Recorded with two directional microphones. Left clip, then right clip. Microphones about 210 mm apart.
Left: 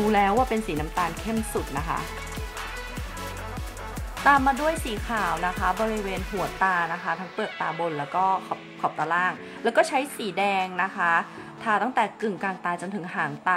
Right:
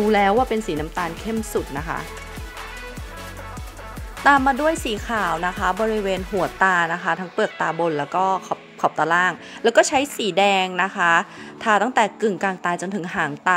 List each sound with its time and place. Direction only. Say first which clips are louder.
0.1 s speech: right 4 dB; 20° right (ahead or behind)
4.2 s speech: right 4 dB; 30° right (ahead or behind)